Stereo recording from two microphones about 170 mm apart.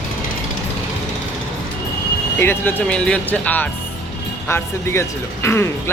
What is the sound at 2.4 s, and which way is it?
Speech, 10° left (ahead or behind).